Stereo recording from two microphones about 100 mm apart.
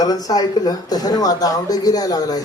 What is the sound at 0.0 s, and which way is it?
Speech, 40° left (ahead or behind).